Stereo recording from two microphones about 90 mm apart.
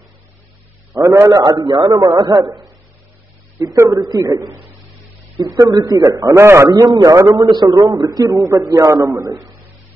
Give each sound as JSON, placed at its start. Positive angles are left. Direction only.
{"t": 1.3, "sound": "a man's voice", "side_deg": -45}
{"t": 1.6, "sound": "a man's voice", "side_deg": -60}
{"t": 3.7, "sound": "a man's voice", "side_deg": -35}
{"t": 6.4, "sound": "a man's voice", "side_deg": -30}
{"t": 6.7, "sound": "a man's voice", "side_deg": -50}